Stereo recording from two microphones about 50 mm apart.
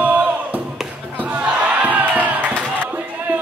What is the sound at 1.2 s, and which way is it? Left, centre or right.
Crowd, right.